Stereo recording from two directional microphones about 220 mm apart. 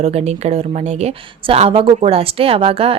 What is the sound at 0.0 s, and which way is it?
Speech, 30° right (ahead or behind).